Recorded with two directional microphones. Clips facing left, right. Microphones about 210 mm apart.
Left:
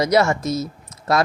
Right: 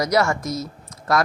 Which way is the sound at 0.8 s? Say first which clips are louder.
Even; 25° left (ahead or behind).